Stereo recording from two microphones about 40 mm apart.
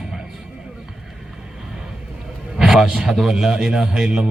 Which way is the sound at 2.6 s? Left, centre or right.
Centre.